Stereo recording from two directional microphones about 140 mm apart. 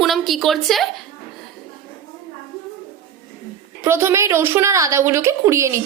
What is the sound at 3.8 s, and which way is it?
A woman's voice, 20° right (ahead or behind).